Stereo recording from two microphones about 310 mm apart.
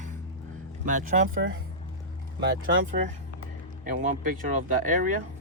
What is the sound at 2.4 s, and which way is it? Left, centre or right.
Speech, right.